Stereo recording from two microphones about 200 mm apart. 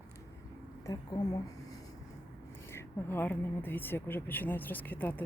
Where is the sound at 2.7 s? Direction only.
10° left (ahead or behind).